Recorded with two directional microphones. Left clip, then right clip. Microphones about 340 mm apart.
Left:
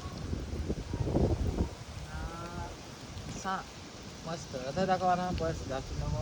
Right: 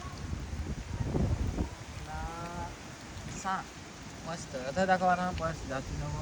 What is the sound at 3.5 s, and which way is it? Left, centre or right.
Speech, centre.